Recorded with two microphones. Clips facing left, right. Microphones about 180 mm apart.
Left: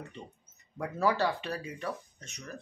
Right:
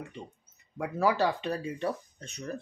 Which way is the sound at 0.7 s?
15° right (ahead or behind).